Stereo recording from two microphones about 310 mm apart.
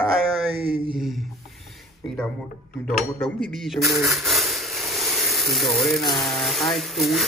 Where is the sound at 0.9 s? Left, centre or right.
Centre.